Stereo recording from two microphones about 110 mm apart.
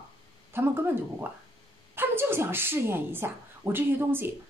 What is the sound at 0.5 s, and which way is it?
Speech, 20° right (ahead or behind).